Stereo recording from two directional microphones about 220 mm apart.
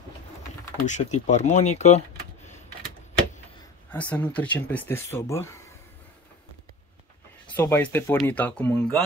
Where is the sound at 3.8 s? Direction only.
5° left (ahead or behind).